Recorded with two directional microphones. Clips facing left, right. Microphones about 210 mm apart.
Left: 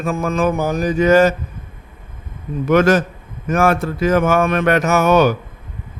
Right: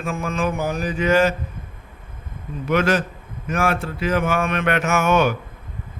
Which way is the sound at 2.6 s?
45° left (ahead or behind).